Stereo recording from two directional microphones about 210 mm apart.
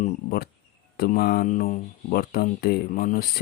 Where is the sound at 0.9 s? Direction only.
45° left (ahead or behind).